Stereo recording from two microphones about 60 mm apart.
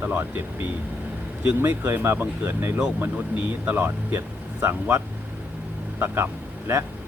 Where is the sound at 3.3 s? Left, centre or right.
Right.